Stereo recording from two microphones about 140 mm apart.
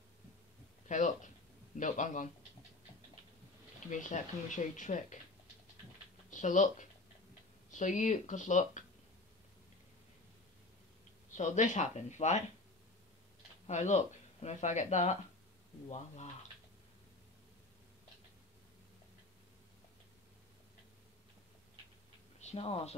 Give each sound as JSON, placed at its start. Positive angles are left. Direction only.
{"t": 0.8, "sound": "a sound", "side_deg": 60}
{"t": 1.8, "sound": "speech", "side_deg": 65}
{"t": 3.9, "sound": "speech", "side_deg": 65}
{"t": 6.3, "sound": "speech", "side_deg": 60}
{"t": 11.3, "sound": "speech", "side_deg": 60}
{"t": 13.7, "sound": "speech", "side_deg": 60}
{"t": 22.4, "sound": "speech", "side_deg": 50}